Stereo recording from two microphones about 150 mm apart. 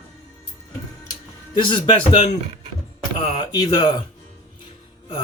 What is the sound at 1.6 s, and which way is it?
Speech, 35° left (ahead or behind).